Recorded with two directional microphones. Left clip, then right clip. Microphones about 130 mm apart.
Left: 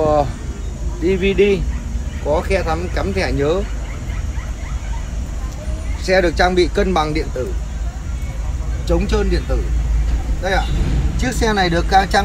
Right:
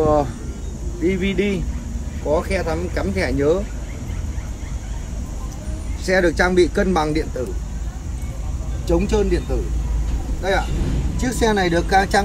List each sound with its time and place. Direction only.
0.0 s speech: 5° right (ahead or behind)
6.0 s speech: 5° left (ahead or behind)
8.8 s speech: 30° right (ahead or behind)
11.1 s speech: 35° right (ahead or behind)